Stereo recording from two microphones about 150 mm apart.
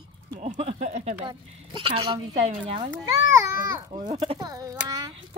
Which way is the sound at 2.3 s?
50° right (ahead or behind).